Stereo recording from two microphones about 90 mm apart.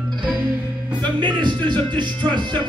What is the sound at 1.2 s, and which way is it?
Music, 60° right (ahead or behind).